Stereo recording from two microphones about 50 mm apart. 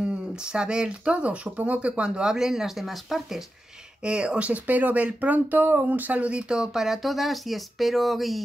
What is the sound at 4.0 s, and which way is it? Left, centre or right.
Speech, centre.